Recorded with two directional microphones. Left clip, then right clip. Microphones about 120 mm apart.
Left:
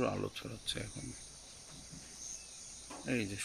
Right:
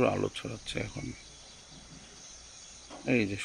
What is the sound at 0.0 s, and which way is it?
Speech, 10° right (ahead or behind).